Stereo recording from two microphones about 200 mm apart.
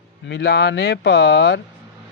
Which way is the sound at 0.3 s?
55° left (ahead or behind).